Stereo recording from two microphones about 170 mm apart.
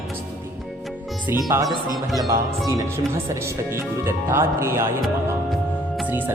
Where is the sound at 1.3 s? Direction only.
15° right (ahead or behind).